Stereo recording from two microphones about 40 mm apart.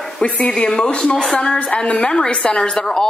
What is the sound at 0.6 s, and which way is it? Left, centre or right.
Speech, centre.